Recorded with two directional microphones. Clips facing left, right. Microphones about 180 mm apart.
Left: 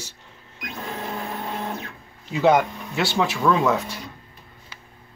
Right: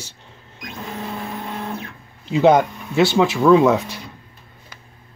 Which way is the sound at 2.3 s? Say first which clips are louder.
Right 4 dB; 20° right (ahead or behind).